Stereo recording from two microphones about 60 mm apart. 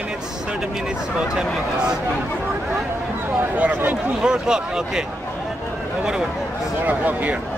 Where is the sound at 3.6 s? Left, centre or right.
Right.